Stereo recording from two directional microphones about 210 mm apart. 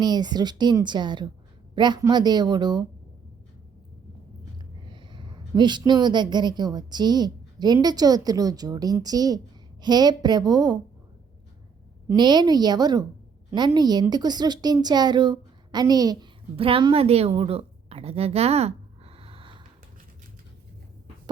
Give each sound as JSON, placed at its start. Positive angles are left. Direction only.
{"t": 0.0, "sound": "a woman's voice", "side_deg": -20}
{"t": 4.9, "sound": "a woman's voice", "side_deg": -20}
{"t": 12.0, "sound": "a woman's voice", "side_deg": -20}